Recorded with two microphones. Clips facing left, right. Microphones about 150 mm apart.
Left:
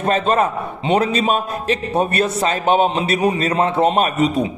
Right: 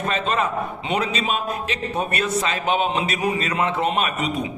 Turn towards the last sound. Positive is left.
turn(degrees=35)  # may be behind; listen again after turning